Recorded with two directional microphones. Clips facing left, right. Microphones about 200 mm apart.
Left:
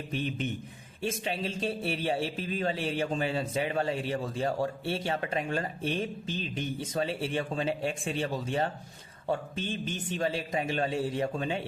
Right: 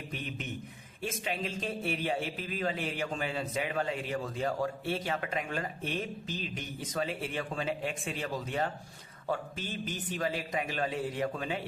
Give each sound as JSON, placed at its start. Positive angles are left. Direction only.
{"t": 0.1, "sound": "a man's voice", "side_deg": 30}